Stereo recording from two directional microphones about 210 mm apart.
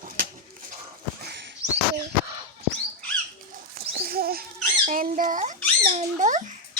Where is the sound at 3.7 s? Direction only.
45° right (ahead or behind).